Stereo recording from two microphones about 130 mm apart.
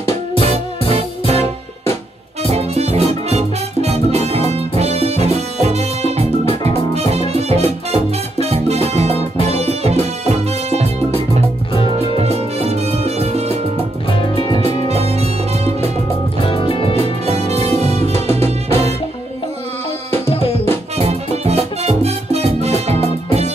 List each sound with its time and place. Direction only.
0.4 s music: 50° right (ahead or behind)
2.5 s music: 55° right (ahead or behind)
12.0 s music: 50° right (ahead or behind)
14.6 s music: 50° right (ahead or behind)
16.3 s music: 45° left (ahead or behind)
17.3 s music: 55° right (ahead or behind)
20.2 s music: 45° left (ahead or behind)
21.0 s music: 55° right (ahead or behind)